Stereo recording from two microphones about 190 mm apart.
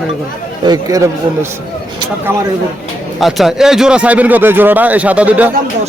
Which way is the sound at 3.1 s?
Centre (ahead or behind).